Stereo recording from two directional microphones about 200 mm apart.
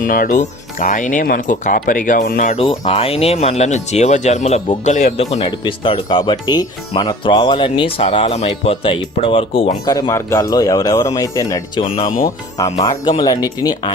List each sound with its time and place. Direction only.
0.0 s speech: 45° left (ahead or behind)
2.6 s speech: 25° left (ahead or behind)